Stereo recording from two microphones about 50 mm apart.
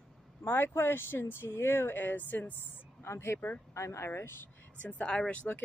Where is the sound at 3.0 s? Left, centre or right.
Left.